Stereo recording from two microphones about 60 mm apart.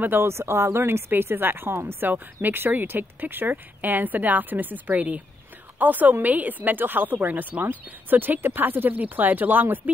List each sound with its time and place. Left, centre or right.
0.0 s a woman's voice: right